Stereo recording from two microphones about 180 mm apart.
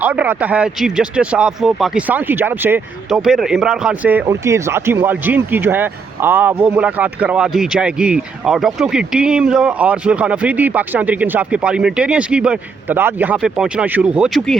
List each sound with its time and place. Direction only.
0.0 s speech: 10° right (ahead or behind)